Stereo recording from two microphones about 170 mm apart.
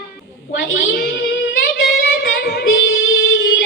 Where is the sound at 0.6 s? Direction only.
70° left (ahead or behind).